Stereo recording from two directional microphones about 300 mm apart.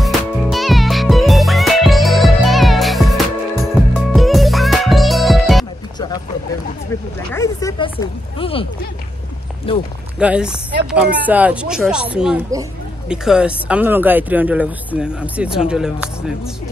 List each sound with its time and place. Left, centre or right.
0.0 s music: centre
6.9 s a sound: centre
9.7 s speech: centre
10.1 s a woman's voice: centre